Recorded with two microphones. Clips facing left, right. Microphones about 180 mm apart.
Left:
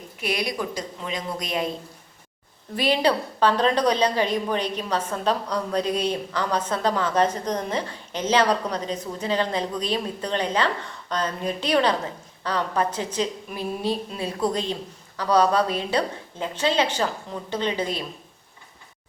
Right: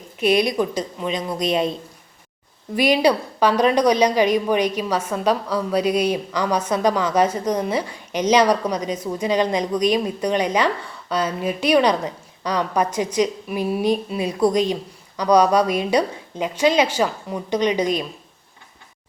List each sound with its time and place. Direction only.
0.2 s a woman's voice: 20° right (ahead or behind)
2.7 s a woman's voice: 10° right (ahead or behind)